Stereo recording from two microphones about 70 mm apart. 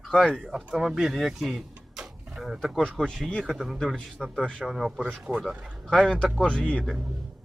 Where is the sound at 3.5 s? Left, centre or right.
Centre.